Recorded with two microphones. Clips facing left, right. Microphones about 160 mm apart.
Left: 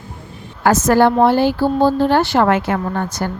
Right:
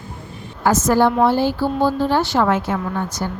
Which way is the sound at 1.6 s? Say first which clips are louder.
Left 4 dB; 30° left (ahead or behind).